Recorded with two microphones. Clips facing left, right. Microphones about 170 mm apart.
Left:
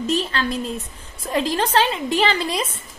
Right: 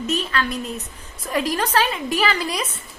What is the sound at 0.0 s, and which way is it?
A woman's voice, 30° left (ahead or behind).